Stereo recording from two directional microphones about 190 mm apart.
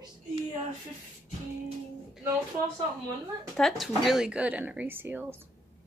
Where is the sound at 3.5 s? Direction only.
Centre (ahead or behind).